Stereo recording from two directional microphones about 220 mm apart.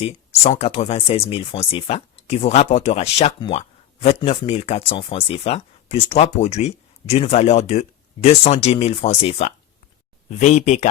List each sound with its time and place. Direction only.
0.0 s speech: 30° left (ahead or behind)